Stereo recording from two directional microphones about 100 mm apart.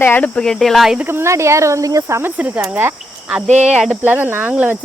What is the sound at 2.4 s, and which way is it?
Speech, 20° right (ahead or behind).